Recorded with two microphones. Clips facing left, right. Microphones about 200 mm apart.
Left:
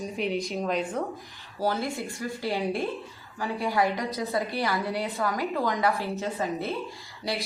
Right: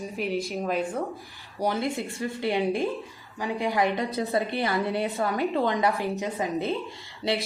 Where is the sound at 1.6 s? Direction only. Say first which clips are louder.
Right 1 dB; 20° right (ahead or behind).